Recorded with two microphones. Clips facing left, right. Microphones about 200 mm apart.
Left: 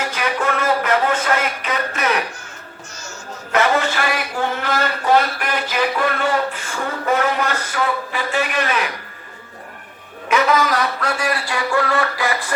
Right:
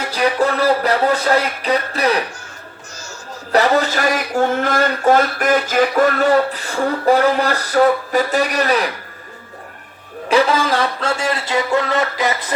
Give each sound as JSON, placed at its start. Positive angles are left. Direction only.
{"t": 0.0, "sound": "music", "side_deg": -35}
{"t": 3.5, "sound": "a sound", "side_deg": -35}
{"t": 10.2, "sound": "a man's voice", "side_deg": -30}